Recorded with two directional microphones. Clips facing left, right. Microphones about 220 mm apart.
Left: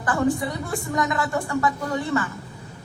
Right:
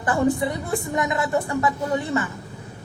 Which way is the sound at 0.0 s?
20° right (ahead or behind).